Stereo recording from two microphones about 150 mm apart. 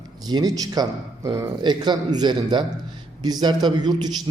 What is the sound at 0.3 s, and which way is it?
A man's voice, 25° right (ahead or behind).